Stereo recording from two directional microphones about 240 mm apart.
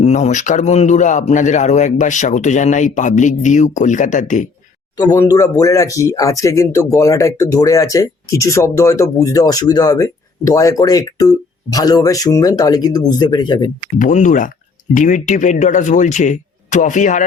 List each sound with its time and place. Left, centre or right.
0.0 s a man's voice: left
4.9 s speech: centre
14.0 s a man's voice: left